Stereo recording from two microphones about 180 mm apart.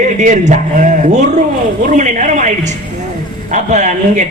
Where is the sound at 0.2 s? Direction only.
45° right (ahead or behind).